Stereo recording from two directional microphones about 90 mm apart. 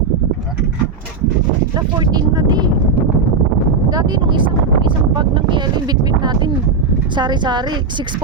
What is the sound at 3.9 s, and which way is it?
A woman's voice, 50° right (ahead or behind).